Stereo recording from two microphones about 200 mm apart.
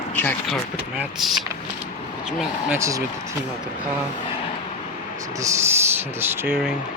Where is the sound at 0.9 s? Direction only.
Centre (ahead or behind).